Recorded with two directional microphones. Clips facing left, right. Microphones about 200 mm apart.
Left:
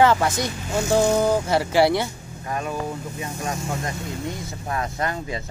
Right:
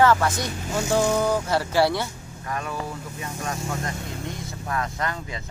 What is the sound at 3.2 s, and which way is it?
Speech, 20° left (ahead or behind).